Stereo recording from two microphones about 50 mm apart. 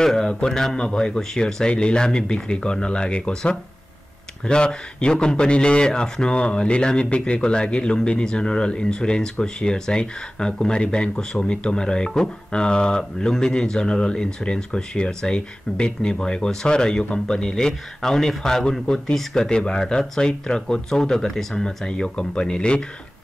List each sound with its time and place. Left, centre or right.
0.0 s a man's voice: centre